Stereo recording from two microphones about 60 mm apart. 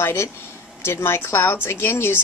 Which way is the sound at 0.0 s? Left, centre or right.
Left.